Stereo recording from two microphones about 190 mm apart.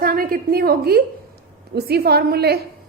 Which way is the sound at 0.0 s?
50° right (ahead or behind).